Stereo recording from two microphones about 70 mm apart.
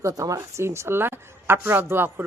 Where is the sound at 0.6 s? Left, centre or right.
Right.